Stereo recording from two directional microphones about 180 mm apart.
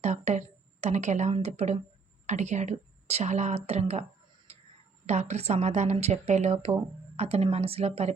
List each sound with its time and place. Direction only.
0.0 s a woman's voice: 40° right (ahead or behind)
4.5 s a sound: 35° right (ahead or behind)
5.0 s speech: 35° right (ahead or behind)